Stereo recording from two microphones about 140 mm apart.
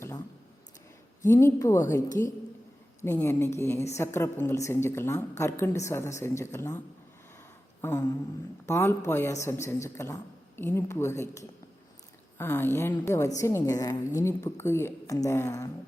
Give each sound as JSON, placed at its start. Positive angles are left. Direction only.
{"t": 1.2, "sound": "a woman's voice", "side_deg": 20}
{"t": 7.8, "sound": "a sound", "side_deg": 20}
{"t": 8.6, "sound": "a woman's voice", "side_deg": 20}